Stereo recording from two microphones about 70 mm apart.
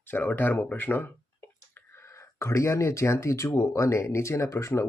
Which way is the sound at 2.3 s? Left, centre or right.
Left.